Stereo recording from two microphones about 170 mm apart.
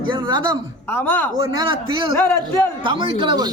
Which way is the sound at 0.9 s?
10° left (ahead or behind).